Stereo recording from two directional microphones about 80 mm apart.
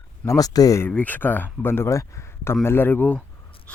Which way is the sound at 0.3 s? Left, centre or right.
Left.